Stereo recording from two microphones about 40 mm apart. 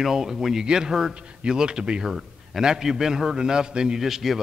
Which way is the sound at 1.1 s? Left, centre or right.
Right.